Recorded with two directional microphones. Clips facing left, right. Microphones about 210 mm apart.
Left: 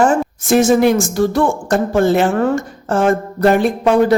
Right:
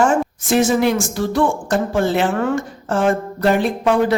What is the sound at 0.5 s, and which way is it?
A woman's voice, 50° left (ahead or behind).